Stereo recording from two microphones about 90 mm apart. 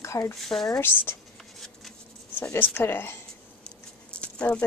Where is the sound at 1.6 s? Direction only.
5° left (ahead or behind).